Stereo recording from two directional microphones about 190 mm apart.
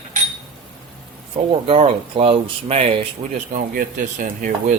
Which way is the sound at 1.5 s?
30° right (ahead or behind).